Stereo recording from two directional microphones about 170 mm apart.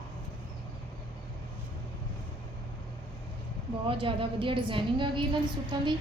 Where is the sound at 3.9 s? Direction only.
30° right (ahead or behind).